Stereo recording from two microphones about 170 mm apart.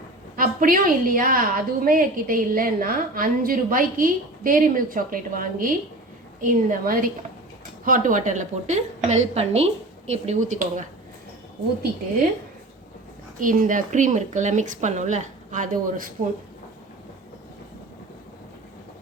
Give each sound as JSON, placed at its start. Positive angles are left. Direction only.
{"t": 0.3, "sound": "a woman's voice", "side_deg": -55}
{"t": 13.4, "sound": "speech", "side_deg": -50}